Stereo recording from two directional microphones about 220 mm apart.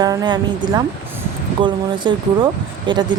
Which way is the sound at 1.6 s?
20° right (ahead or behind).